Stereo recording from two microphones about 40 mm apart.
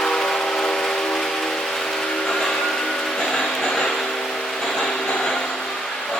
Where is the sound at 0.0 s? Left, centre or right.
Centre.